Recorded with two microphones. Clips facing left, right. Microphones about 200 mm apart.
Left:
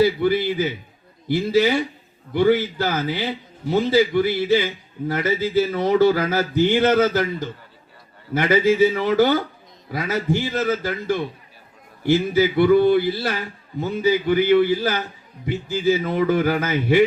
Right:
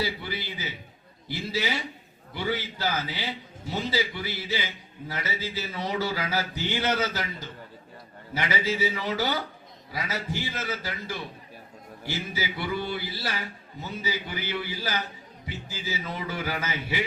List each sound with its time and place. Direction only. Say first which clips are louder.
0.0 s speech: left 14 dB; 55° left (ahead or behind)